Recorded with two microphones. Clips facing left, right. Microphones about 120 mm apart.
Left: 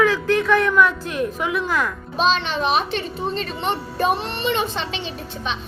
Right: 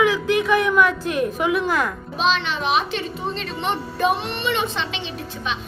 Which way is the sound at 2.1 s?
40° left (ahead or behind).